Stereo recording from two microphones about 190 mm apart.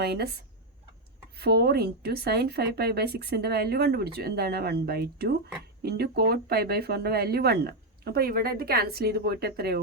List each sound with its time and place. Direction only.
0.0 s speech: 55° right (ahead or behind)